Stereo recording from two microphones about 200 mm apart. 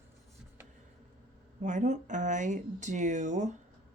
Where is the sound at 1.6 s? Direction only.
35° right (ahead or behind).